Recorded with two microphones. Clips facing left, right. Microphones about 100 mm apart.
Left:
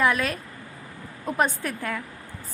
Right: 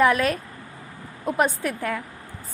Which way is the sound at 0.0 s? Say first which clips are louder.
Right 4 dB; 35° right (ahead or behind).